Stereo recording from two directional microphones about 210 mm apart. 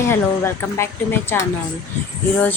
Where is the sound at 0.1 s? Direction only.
10° left (ahead or behind).